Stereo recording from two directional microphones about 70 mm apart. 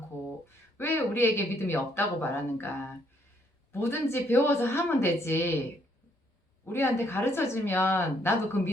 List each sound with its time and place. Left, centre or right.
0.4 s a woman's voice: left
6.7 s a woman's voice: left